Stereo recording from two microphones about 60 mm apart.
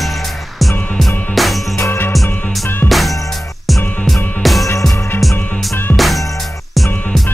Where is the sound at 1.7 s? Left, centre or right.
Left.